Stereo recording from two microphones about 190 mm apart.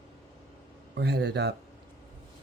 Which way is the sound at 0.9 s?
60° right (ahead or behind).